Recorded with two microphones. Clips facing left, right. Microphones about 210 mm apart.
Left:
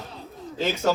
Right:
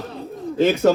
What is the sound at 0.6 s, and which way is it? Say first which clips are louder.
Speech: right 8 dB; 60° right (ahead or behind).